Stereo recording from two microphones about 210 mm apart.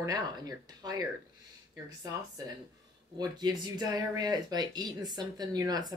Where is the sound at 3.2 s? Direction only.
20° right (ahead or behind).